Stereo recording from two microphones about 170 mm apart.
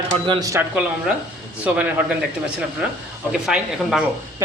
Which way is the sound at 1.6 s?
10° right (ahead or behind).